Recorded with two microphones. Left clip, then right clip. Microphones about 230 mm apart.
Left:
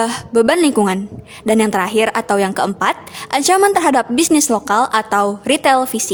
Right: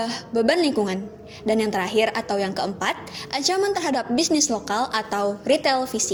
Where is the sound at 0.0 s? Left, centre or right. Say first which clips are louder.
Left 8 dB; left.